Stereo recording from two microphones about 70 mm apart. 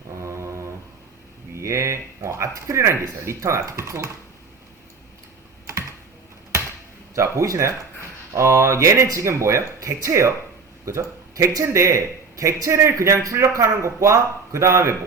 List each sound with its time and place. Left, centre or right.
0.2 s a sound: right
1.5 s speech: right
7.2 s speech: right